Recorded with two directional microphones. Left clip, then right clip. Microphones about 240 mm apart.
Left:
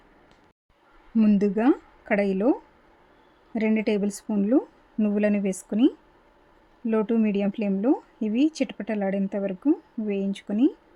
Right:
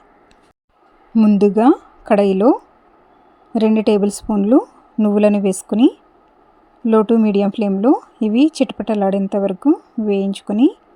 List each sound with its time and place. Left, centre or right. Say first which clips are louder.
1.4 s a woman's voice: right 13 dB; centre